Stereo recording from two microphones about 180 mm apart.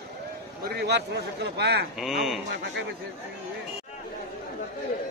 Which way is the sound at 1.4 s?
70° right (ahead or behind).